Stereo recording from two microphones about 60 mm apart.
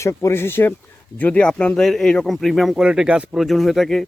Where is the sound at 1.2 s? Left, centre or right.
Centre.